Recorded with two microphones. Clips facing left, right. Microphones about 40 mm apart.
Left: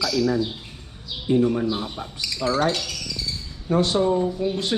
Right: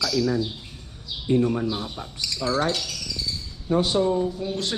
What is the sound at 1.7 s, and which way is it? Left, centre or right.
Speech, left.